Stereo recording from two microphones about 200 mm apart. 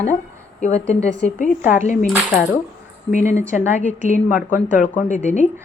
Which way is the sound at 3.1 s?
35° left (ahead or behind).